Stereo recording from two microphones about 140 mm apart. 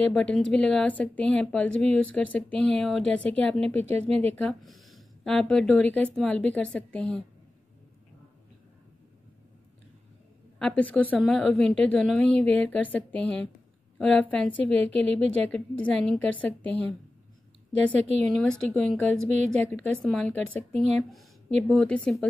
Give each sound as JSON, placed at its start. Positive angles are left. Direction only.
{"t": 0.1, "sound": "a woman's voice", "side_deg": 5}
{"t": 3.8, "sound": "speech", "side_deg": -45}
{"t": 4.3, "sound": "a woman's voice", "side_deg": 5}
{"t": 10.6, "sound": "a woman's voice", "side_deg": 10}
{"t": 16.6, "sound": "a woman's voice", "side_deg": -40}
{"t": 17.7, "sound": "a woman's voice", "side_deg": 10}